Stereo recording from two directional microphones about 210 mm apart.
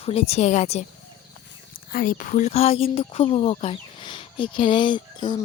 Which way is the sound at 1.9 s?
40° left (ahead or behind).